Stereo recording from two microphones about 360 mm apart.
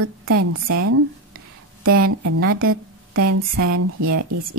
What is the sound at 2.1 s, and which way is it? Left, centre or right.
A woman's voice, right.